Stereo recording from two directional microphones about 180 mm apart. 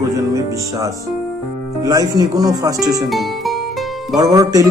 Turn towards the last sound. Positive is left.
turn(degrees=-20)  # may be behind; listen again after turning